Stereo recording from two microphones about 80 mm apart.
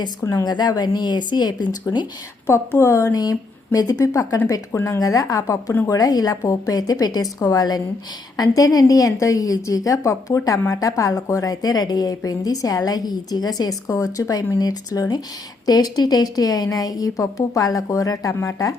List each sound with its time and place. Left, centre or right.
0.2 s a woman's voice: left
0.4 s speech: left
2.5 s a woman's voice: left
3.2 s a woman's voice: left